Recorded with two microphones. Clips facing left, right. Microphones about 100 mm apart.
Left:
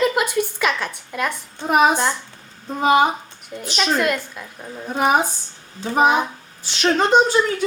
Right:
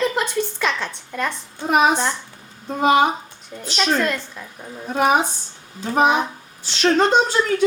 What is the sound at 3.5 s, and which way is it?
Speech, centre (ahead or behind).